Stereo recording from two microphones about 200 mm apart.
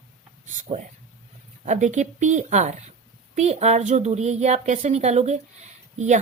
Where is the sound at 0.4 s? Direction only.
40° right (ahead or behind).